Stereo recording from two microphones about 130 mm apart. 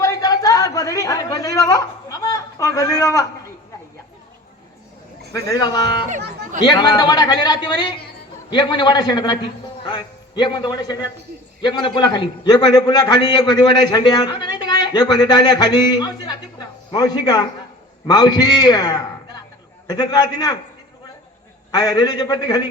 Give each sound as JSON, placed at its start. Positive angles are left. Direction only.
{"t": 0.0, "sound": "a sound", "side_deg": 30}
{"t": 5.3, "sound": "a man's voice", "side_deg": 30}
{"t": 21.7, "sound": "a man's voice", "side_deg": 30}